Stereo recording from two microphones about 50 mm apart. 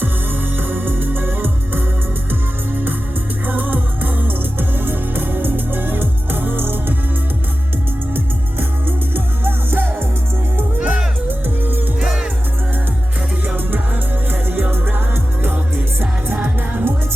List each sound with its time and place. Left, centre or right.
0.5 s music: right
8.1 s music: right
10.8 s music: right
11.3 s music: right
11.9 s music: centre
13.7 s music: right